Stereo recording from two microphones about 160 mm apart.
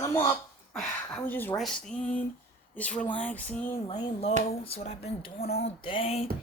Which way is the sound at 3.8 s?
40° left (ahead or behind).